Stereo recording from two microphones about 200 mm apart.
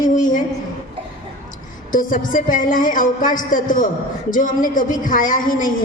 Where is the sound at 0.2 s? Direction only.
40° left (ahead or behind).